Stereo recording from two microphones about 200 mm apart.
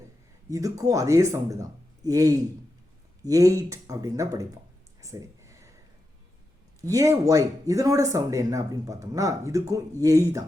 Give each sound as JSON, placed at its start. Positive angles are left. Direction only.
{"t": 0.5, "sound": "speech", "side_deg": -15}
{"t": 4.9, "sound": "a sound", "side_deg": -15}
{"t": 6.8, "sound": "speech", "side_deg": -15}